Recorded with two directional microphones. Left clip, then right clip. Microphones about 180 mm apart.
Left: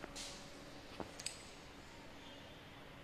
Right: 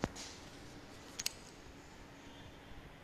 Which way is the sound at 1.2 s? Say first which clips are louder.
Right 10 dB; 70° right (ahead or behind).